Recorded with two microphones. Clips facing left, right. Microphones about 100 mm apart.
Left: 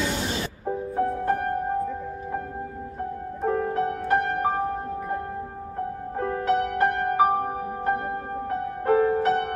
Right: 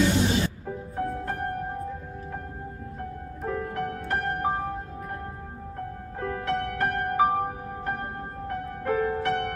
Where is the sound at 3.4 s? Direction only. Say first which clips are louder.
Left 6 dB; 30° left (ahead or behind).